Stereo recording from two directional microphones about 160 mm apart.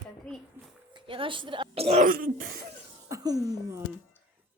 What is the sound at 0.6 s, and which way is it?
Speech, 15° right (ahead or behind).